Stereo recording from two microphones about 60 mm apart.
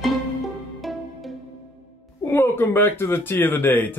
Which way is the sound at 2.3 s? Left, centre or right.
Left.